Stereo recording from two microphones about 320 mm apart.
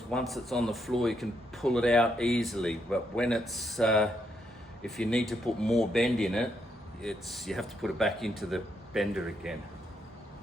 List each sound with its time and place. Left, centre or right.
0.1 s speech: centre